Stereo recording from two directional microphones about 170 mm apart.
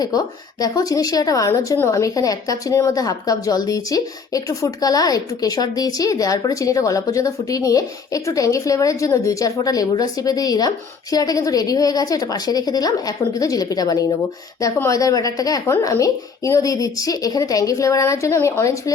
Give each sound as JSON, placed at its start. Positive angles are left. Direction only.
{"t": 0.6, "sound": "a woman's voice", "side_deg": 20}